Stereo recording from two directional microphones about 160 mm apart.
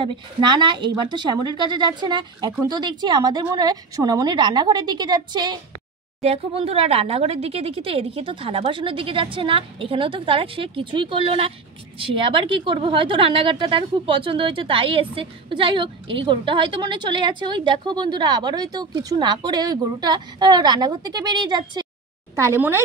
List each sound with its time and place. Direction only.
0.0 s a woman's voice: 30° right (ahead or behind)
6.2 s a woman's voice: 40° right (ahead or behind)
22.3 s a woman's voice: 15° right (ahead or behind)